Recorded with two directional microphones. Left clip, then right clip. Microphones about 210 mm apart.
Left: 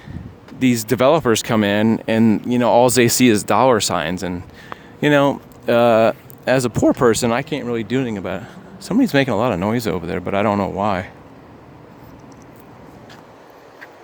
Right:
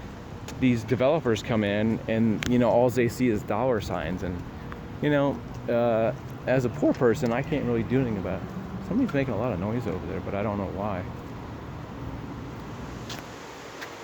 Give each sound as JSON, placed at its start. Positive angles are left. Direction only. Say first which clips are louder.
{"t": 0.6, "sound": "speech", "louder": "left 8 dB", "side_deg": 65}
{"t": 2.5, "sound": "speech", "louder": "left 7 dB", "side_deg": 45}